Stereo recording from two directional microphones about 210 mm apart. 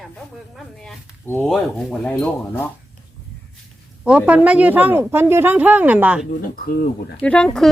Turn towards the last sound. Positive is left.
turn(degrees=5)  # may be behind; listen again after turning